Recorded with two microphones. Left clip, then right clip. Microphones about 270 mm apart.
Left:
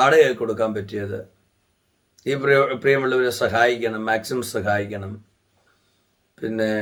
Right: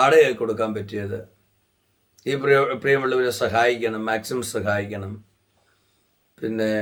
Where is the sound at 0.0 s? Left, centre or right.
Centre.